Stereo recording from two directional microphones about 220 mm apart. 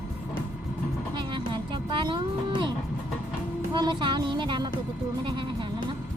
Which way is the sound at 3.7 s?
20° right (ahead or behind).